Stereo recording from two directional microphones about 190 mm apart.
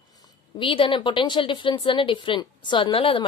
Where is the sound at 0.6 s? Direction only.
30° left (ahead or behind).